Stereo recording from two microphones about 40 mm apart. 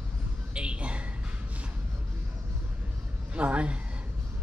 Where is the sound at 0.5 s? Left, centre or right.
Right.